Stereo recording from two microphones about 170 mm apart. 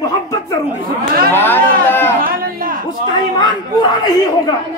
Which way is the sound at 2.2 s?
60° right (ahead or behind).